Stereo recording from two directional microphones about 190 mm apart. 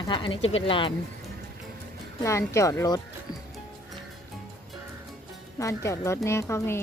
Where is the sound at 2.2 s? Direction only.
15° left (ahead or behind).